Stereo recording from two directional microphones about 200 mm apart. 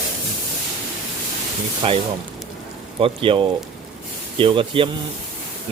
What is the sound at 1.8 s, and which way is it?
Speech, 25° right (ahead or behind).